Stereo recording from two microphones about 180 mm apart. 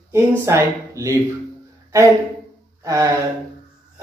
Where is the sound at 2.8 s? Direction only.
15° right (ahead or behind).